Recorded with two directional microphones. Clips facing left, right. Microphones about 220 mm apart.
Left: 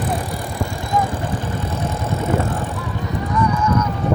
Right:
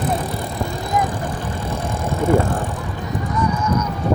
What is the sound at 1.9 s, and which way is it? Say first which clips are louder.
Vehicle: right 6 dB; 15° right (ahead or behind).